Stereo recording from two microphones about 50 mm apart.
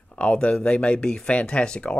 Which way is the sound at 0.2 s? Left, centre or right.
Left.